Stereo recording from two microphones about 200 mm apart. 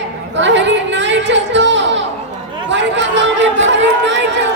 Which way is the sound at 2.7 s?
60° right (ahead or behind).